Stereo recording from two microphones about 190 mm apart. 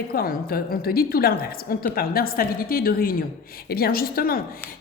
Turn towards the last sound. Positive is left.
turn(degrees=50)  # may be behind; listen again after turning